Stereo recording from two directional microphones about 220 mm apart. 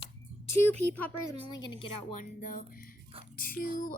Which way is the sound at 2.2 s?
35° left (ahead or behind).